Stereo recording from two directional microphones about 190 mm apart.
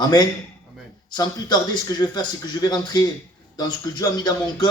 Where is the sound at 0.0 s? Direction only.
20° left (ahead or behind).